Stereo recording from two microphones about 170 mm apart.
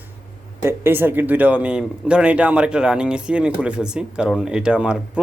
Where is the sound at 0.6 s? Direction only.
15° right (ahead or behind).